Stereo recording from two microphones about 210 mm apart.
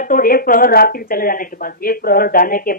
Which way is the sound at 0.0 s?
40° left (ahead or behind).